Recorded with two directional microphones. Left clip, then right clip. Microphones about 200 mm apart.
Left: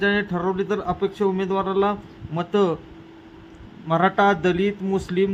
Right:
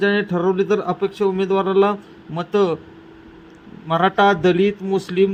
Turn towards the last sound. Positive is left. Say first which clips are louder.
# right 4 dB
turn(degrees=-10)  # may be behind; listen again after turning